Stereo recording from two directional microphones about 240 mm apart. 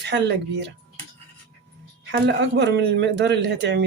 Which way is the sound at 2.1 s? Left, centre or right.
Right.